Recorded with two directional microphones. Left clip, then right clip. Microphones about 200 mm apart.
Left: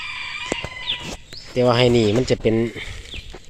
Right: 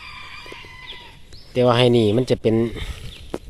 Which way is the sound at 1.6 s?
5° right (ahead or behind).